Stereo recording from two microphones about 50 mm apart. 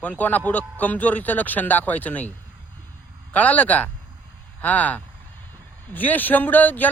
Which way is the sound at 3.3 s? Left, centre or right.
Left.